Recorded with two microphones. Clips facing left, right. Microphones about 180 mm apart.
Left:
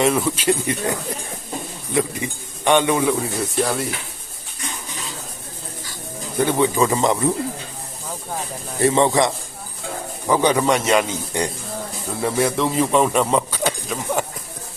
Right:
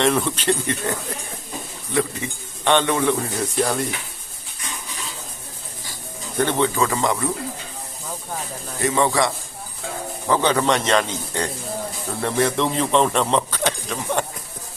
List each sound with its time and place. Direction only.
0.0 s speech: 5° left (ahead or behind)
6.3 s speech: 10° left (ahead or behind)
8.8 s speech: 25° left (ahead or behind); by 14.3 s 5° left (ahead or behind)